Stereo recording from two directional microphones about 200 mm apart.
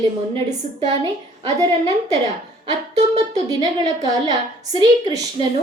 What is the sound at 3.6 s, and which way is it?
Speech, 20° right (ahead or behind).